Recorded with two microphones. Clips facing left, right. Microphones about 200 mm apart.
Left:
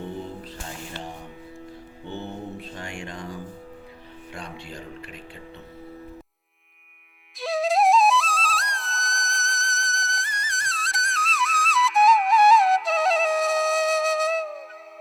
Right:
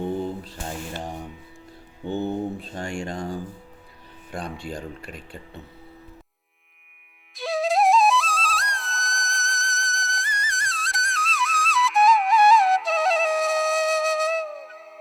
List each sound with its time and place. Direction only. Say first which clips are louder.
2.0 s mantra: right 8 dB; 45° right (ahead or behind)
2.8 s speech: right 8 dB; 30° right (ahead or behind)
7.3 s flute: even; centre (ahead or behind)